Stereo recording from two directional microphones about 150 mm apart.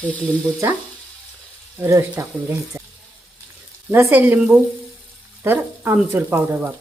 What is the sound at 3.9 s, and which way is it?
Speech, 15° right (ahead or behind).